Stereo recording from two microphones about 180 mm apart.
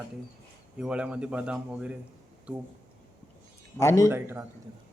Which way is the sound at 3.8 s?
15° left (ahead or behind).